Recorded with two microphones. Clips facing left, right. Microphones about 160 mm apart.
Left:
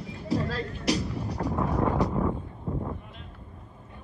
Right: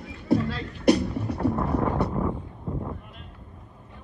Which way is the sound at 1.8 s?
Centre (ahead or behind).